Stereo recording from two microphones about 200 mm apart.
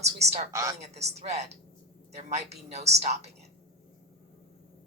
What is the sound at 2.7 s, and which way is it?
Speech, 30° right (ahead or behind).